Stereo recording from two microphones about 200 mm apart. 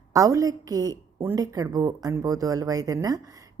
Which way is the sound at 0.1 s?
15° right (ahead or behind).